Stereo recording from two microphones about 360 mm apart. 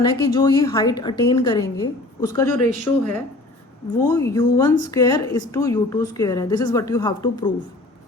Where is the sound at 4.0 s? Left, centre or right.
Centre.